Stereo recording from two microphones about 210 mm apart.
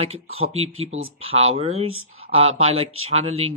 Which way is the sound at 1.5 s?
30° right (ahead or behind).